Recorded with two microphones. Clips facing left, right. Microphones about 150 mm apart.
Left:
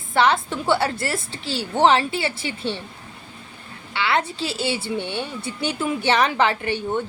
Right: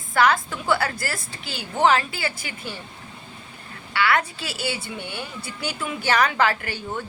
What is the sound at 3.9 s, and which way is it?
A woman's voice, 25° left (ahead or behind).